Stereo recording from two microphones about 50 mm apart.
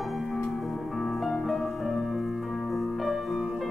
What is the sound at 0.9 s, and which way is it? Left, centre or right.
Music, centre.